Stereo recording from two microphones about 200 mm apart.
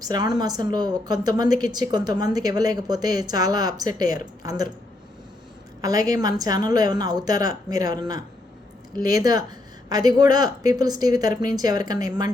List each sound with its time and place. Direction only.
0.0 s a woman's voice: 20° right (ahead or behind)
5.8 s a woman's voice: 20° right (ahead or behind)